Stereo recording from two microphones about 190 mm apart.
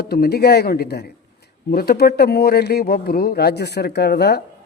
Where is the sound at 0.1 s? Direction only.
55° left (ahead or behind).